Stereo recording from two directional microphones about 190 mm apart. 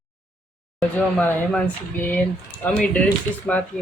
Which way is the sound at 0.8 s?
5° left (ahead or behind).